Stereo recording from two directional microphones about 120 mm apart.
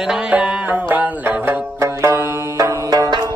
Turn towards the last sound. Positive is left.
turn(degrees=-30)  # may be behind; listen again after turning